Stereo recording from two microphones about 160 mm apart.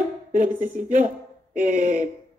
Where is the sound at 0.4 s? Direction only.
55° right (ahead or behind).